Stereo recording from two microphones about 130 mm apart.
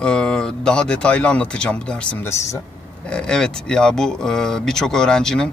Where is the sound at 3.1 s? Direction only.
5° left (ahead or behind).